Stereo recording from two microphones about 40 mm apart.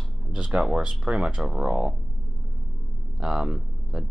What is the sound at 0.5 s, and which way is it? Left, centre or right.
Speech, right.